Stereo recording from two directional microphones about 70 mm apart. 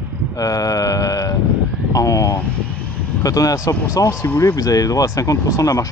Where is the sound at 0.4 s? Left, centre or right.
Left.